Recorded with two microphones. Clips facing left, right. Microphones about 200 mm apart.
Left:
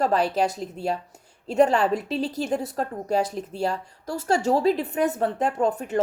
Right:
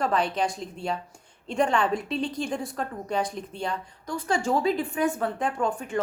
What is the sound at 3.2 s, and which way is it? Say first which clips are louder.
Speech: left 2 dB; 5° left (ahead or behind).